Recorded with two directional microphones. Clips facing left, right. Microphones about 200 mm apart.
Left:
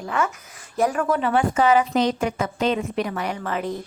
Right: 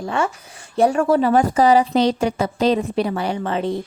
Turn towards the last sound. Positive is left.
turn(degrees=-30)  # may be behind; listen again after turning